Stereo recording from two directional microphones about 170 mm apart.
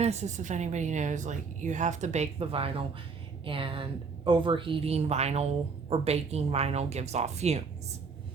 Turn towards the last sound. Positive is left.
turn(degrees=-40)  # may be behind; listen again after turning